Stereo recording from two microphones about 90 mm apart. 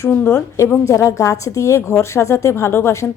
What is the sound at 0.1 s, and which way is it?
A woman's voice, 30° left (ahead or behind).